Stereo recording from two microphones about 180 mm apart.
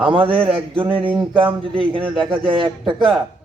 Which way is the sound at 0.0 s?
30° right (ahead or behind).